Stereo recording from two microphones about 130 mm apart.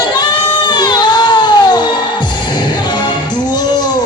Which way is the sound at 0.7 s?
35° left (ahead or behind).